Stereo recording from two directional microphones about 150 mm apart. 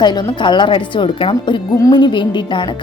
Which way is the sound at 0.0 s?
30° left (ahead or behind).